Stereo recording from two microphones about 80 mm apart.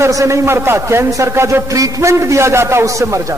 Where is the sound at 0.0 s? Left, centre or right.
Right.